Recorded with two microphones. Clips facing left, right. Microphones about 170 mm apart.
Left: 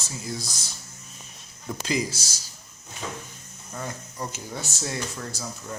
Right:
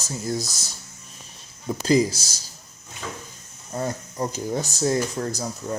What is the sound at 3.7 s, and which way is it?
Speech, 40° right (ahead or behind).